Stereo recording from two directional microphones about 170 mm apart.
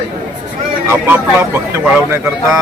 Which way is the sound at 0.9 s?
15° right (ahead or behind).